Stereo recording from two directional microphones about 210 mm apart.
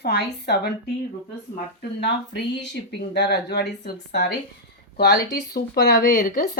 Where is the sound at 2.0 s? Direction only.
55° left (ahead or behind).